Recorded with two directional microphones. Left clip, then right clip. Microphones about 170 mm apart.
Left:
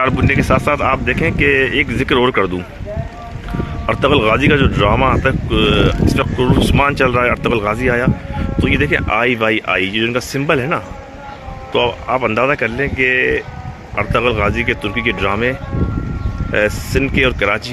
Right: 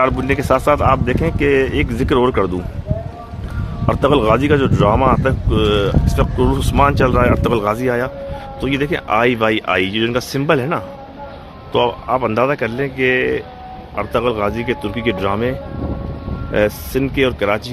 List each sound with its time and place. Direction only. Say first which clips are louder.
0.0 s speech: left 1 dB; 10° right (ahead or behind)
3.8 s speech: left 1 dB; 5° right (ahead or behind)